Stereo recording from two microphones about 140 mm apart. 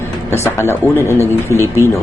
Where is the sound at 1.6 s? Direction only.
20° right (ahead or behind).